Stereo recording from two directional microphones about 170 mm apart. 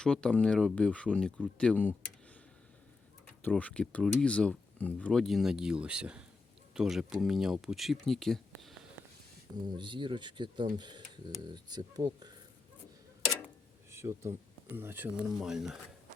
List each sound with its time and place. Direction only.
0.0 s speech: 5° left (ahead or behind)
3.4 s speech: 10° left (ahead or behind)
9.6 s speech: 25° right (ahead or behind)
13.9 s speech: 15° right (ahead or behind)